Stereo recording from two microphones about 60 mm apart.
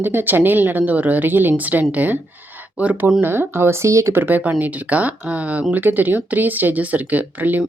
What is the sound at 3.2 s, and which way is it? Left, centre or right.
Speech, right.